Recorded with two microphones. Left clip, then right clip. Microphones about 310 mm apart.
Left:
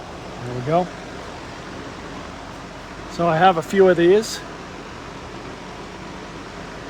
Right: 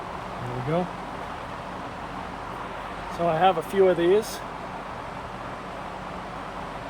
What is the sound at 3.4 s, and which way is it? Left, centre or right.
Speech, left.